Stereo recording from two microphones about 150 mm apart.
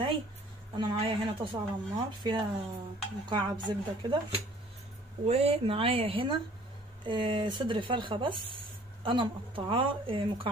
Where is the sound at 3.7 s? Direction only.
30° right (ahead or behind).